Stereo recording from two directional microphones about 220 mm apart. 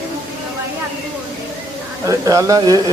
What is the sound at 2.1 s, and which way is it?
Speech, 15° right (ahead or behind).